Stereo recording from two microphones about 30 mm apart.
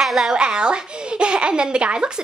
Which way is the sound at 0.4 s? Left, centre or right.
Right.